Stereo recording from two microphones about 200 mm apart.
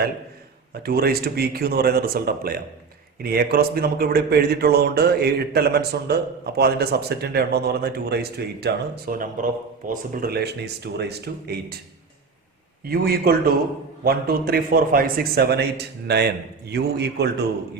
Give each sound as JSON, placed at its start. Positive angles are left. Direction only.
{"t": 0.7, "sound": "speech", "side_deg": -50}
{"t": 12.8, "sound": "speech", "side_deg": -50}